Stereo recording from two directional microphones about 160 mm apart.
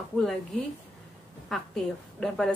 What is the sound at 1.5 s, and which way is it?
A woman's voice, 5° left (ahead or behind).